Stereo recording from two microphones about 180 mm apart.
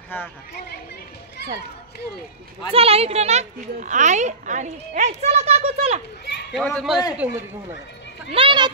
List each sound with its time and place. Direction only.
2.7 s a child's voice: 35° right (ahead or behind)
6.5 s a man's voice: 5° left (ahead or behind)
8.3 s a child's voice: 30° right (ahead or behind)